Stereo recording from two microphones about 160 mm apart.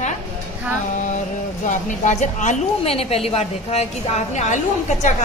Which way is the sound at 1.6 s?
50° left (ahead or behind).